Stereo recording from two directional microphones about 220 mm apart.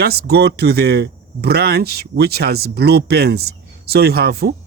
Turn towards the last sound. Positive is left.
turn(degrees=-45)  # may be behind; listen again after turning